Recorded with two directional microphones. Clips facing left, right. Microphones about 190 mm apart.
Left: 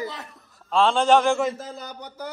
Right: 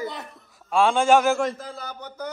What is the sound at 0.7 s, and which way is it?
Speech, 10° right (ahead or behind).